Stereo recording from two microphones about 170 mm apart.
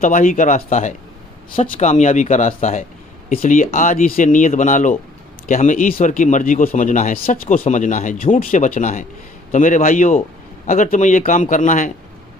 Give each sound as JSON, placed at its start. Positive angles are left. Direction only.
{"t": 0.0, "sound": "speech", "side_deg": 50}